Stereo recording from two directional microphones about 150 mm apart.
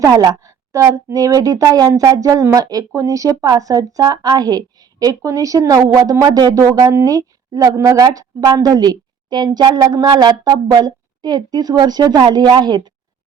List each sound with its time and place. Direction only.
0.0 s speech: 25° right (ahead or behind)